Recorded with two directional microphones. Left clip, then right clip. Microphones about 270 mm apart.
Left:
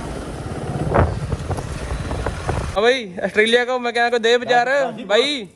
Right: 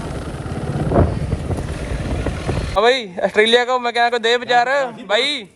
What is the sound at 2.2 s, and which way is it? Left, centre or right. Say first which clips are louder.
Boat: left 1 dB; right.